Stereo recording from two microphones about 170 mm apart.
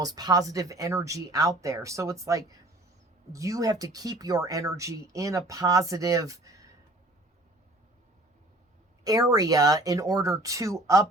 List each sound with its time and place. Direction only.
0.0 s speech: 25° right (ahead or behind)
9.3 s speech: 20° right (ahead or behind)